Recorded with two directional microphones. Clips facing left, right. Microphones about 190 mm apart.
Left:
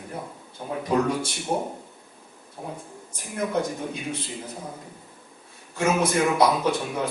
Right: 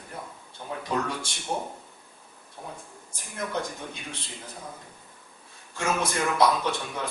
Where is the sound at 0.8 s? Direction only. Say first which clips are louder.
Left 7 dB; 10° left (ahead or behind).